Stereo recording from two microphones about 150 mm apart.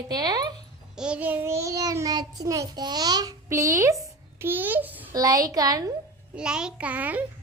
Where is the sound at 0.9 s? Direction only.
5° right (ahead or behind).